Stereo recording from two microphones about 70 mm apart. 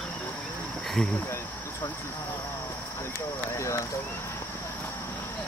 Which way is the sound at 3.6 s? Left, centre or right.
Left.